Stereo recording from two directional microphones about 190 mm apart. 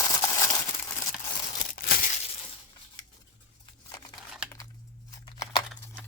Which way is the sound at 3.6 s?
20° left (ahead or behind).